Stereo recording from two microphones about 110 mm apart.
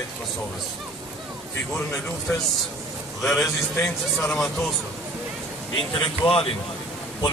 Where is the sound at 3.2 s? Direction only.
Centre (ahead or behind).